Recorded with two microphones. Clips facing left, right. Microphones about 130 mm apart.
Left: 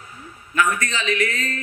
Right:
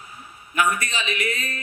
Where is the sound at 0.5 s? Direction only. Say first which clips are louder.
Left 1 dB; 15° right (ahead or behind).